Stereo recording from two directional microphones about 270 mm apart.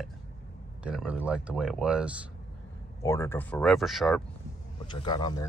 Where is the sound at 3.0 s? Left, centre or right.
Centre.